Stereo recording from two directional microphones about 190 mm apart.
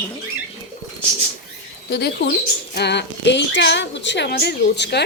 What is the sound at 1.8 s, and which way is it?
A woman's voice, 60° left (ahead or behind).